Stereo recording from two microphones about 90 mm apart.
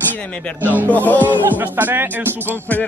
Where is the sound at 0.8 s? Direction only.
15° left (ahead or behind).